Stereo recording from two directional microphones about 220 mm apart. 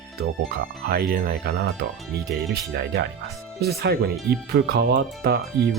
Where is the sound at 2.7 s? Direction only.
45° right (ahead or behind).